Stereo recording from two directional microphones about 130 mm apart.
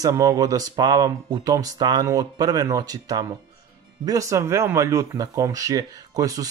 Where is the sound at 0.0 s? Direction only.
25° right (ahead or behind).